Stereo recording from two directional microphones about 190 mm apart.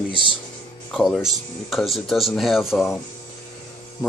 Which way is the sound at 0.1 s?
25° right (ahead or behind).